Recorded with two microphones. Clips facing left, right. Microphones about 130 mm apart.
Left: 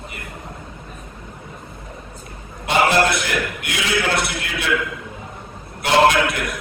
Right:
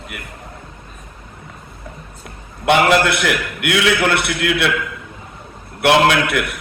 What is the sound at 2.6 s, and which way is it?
A man's voice, 65° right (ahead or behind).